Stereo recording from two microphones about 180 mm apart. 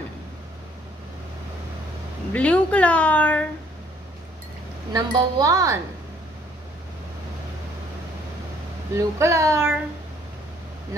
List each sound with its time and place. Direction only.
2.3 s a woman's voice: 5° left (ahead or behind)
4.9 s speech: 20° right (ahead or behind)
8.9 s a child's voice: 15° right (ahead or behind)